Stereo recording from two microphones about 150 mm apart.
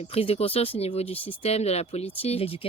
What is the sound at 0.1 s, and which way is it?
Speech, 40° left (ahead or behind).